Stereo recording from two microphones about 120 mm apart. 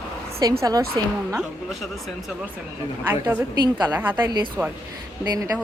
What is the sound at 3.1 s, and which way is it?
Speech, 20° right (ahead or behind).